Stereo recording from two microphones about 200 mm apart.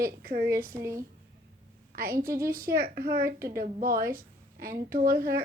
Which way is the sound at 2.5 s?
50° right (ahead or behind).